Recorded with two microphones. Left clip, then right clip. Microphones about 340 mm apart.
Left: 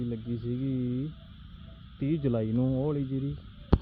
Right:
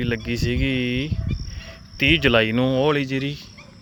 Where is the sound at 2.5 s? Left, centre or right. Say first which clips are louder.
Right 11 dB; right.